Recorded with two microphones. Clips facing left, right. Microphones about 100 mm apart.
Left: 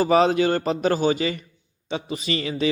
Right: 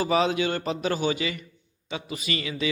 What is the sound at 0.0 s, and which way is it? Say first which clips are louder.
Speech: left 5 dB; 40° left (ahead or behind).